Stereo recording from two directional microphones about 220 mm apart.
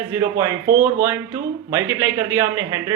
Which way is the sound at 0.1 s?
15° right (ahead or behind).